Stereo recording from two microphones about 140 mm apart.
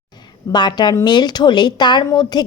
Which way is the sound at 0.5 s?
30° left (ahead or behind).